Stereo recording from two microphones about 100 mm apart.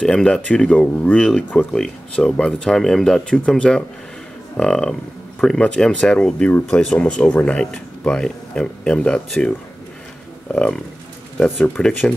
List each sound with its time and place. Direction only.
0.0 s speech: 10° left (ahead or behind)
10.5 s speech: 10° left (ahead or behind)